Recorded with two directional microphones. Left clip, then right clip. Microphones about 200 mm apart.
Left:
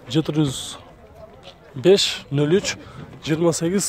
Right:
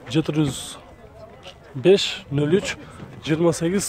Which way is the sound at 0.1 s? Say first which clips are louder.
Left 1 dB; 10° left (ahead or behind).